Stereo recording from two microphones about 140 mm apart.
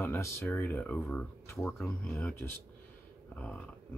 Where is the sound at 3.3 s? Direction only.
10° left (ahead or behind).